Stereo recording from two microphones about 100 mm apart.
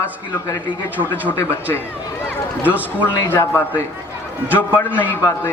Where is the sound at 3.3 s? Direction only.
20° left (ahead or behind).